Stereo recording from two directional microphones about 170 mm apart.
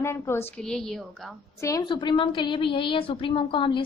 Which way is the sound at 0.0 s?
15° left (ahead or behind).